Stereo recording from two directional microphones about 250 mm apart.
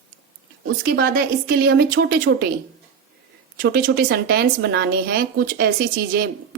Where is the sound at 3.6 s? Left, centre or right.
Right.